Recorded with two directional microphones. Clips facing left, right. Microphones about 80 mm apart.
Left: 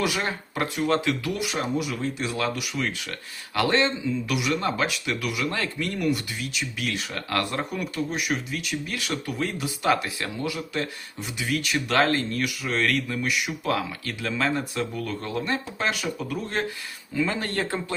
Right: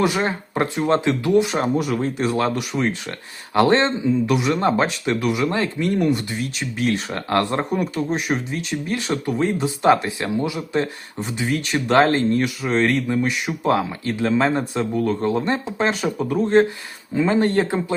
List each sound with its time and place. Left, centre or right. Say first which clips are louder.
0.0 s speech: right 6 dB; right
1.6 s speech: right 6 dB; right
11.2 s speech: right 5 dB; right